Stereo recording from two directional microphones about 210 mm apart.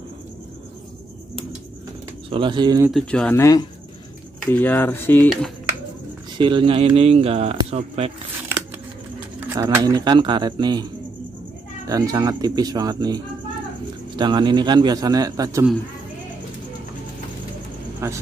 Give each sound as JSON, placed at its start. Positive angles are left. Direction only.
{"t": 2.2, "sound": "speech", "side_deg": -25}
{"t": 2.9, "sound": "speech", "side_deg": 0}
{"t": 6.3, "sound": "speech", "side_deg": -25}
{"t": 9.4, "sound": "speech", "side_deg": -15}
{"t": 11.9, "sound": "speech", "side_deg": -15}
{"t": 18.0, "sound": "speech", "side_deg": -15}